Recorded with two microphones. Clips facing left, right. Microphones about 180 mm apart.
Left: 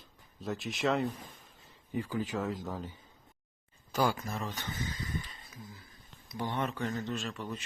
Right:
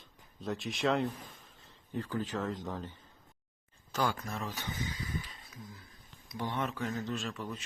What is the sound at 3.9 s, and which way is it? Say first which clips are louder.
Speech: left 3 dB; 10° left (ahead or behind).